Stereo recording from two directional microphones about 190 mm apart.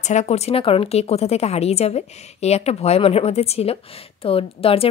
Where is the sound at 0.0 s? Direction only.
40° left (ahead or behind).